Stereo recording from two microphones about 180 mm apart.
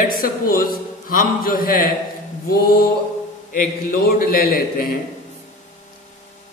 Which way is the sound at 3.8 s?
55° left (ahead or behind).